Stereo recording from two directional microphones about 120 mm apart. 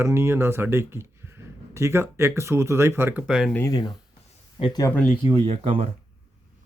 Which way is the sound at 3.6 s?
35° left (ahead or behind).